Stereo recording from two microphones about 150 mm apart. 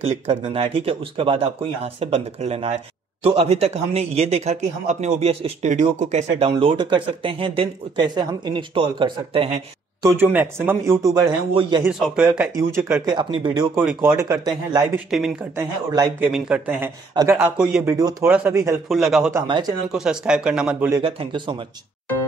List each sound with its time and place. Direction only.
0.4 s speech: 35° right (ahead or behind); by 6.5 s 55° right (ahead or behind)
6.6 s speech: 35° right (ahead or behind)
10.1 s speech: 10° right (ahead or behind)
11.0 s speech: 25° right (ahead or behind)
12.0 s speech: 5° right (ahead or behind)
13.1 s speech: 30° right (ahead or behind)
13.7 s speech: 15° right (ahead or behind)
15.0 s speech: 5° right (ahead or behind)
15.5 s speech: 25° right (ahead or behind)
16.2 s speech: 5° right (ahead or behind)
18.9 s speech: centre (ahead or behind)
19.4 s speech: 30° right (ahead or behind)
19.9 s speech: 5° right (ahead or behind)
21.0 s speech: 35° right (ahead or behind)